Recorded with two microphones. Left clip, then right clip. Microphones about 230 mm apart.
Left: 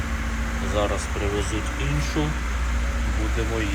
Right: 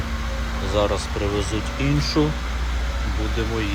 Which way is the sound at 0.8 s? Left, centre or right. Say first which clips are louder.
Right 4 dB; centre.